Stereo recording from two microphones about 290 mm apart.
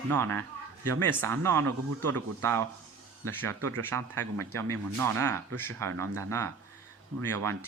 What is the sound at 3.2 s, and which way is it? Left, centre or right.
Speech, centre.